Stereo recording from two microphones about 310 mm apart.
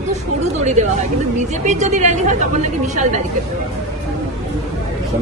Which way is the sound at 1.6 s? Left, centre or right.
Right.